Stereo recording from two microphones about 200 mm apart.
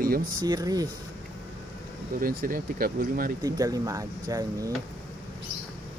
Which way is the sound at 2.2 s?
45° right (ahead or behind).